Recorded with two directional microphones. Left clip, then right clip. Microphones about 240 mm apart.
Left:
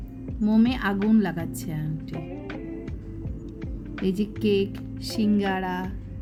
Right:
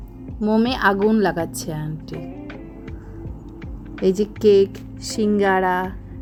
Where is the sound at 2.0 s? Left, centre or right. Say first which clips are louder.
Right 2 dB; centre.